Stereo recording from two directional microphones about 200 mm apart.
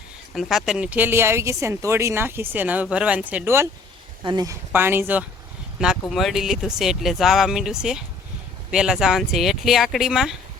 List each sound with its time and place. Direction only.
0.3 s speech: centre (ahead or behind)